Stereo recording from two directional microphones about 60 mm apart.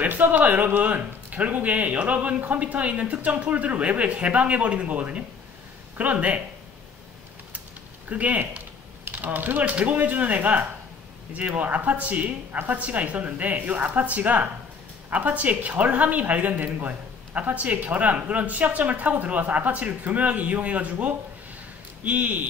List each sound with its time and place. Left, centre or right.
0.0 s speech: right
8.1 s speech: right